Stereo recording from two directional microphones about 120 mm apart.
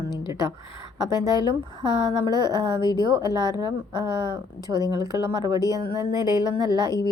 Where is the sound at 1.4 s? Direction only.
35° right (ahead or behind).